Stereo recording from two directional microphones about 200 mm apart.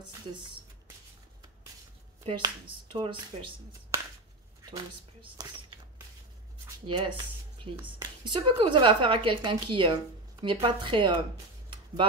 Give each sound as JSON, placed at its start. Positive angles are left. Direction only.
{"t": 2.2, "sound": "a woman's voice", "side_deg": -25}
{"t": 6.9, "sound": "a woman's voice", "side_deg": -25}